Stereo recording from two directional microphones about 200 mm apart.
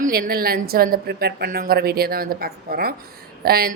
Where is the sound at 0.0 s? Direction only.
50° right (ahead or behind).